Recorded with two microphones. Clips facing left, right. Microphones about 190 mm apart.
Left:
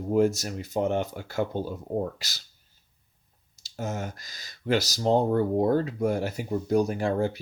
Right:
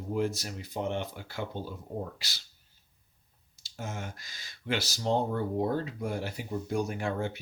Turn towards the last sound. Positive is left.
turn(degrees=35)  # may be behind; listen again after turning